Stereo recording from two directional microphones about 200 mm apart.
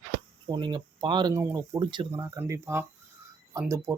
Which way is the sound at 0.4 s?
20° right (ahead or behind).